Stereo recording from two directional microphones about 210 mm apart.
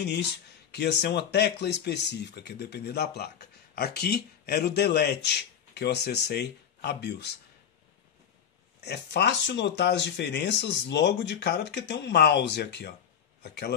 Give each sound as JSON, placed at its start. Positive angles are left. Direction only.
{"t": 0.7, "sound": "speech", "side_deg": 55}
{"t": 8.8, "sound": "a man's voice", "side_deg": 50}